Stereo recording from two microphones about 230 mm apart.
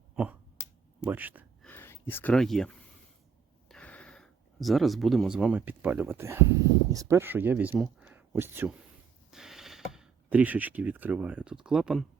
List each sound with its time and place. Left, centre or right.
1.0 s speech: centre
1.6 s speech: centre